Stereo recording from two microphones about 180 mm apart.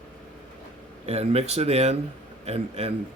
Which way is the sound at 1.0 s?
35° right (ahead or behind).